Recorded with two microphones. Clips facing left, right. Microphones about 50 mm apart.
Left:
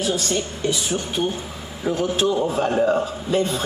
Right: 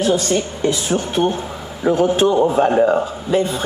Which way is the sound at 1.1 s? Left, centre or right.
Right.